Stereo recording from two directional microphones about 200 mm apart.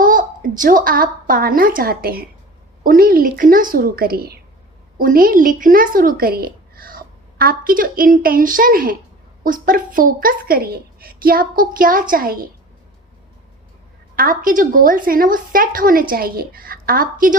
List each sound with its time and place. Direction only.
0.0 s a woman's voice: 40° right (ahead or behind)
14.2 s a woman's voice: 45° right (ahead or behind)